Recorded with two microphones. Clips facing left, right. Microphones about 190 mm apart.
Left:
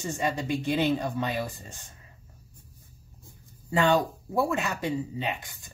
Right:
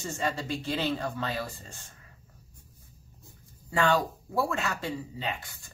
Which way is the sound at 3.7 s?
20° left (ahead or behind).